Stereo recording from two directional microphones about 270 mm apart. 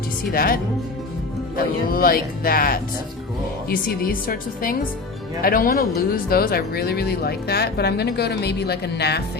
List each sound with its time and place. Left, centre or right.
0.3 s speech: left